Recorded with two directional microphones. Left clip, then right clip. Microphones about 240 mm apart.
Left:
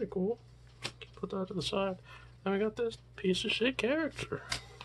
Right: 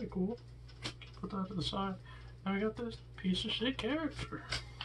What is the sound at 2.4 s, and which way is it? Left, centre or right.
Speech, left.